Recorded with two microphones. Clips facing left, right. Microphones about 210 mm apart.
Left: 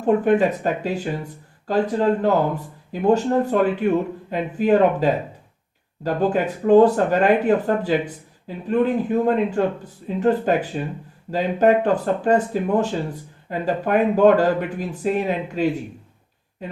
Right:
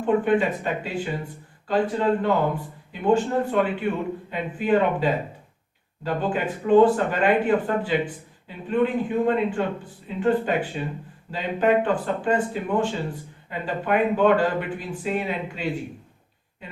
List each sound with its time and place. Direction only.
0.0 s speech: 40° left (ahead or behind)